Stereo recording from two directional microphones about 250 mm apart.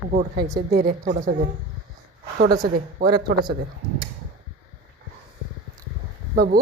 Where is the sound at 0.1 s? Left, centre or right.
Right.